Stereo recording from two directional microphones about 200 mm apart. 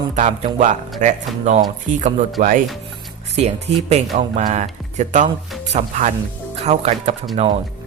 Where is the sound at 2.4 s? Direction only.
40° right (ahead or behind).